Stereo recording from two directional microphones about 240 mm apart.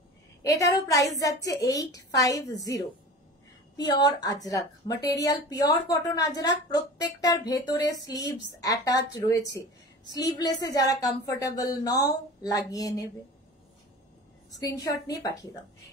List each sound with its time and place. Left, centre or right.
0.5 s a woman's voice: centre
14.5 s a woman's voice: centre